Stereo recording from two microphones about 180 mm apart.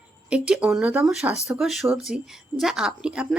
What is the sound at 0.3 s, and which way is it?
Speech, 5° right (ahead or behind).